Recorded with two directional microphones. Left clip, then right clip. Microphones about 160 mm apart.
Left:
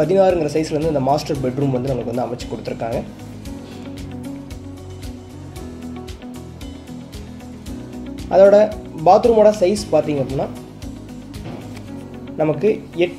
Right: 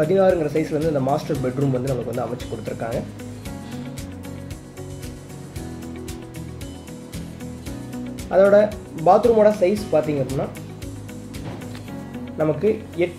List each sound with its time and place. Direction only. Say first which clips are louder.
0.0 s speech: left 3 dB; 30° left (ahead or behind)
8.3 s speech: left 4 dB; 25° left (ahead or behind)
12.4 s speech: left 3 dB; 30° left (ahead or behind)